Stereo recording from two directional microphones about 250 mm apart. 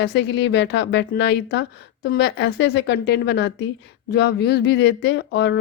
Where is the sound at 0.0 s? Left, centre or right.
Left.